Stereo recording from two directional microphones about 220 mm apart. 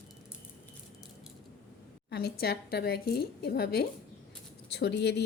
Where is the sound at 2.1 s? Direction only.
45° left (ahead or behind).